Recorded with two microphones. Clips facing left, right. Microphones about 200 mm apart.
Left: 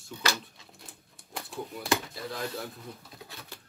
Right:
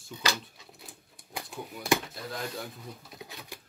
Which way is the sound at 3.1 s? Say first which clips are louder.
Right 2 dB; 15° right (ahead or behind).